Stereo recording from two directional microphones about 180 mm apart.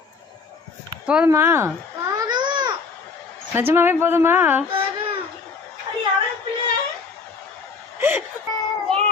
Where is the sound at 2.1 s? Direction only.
25° right (ahead or behind).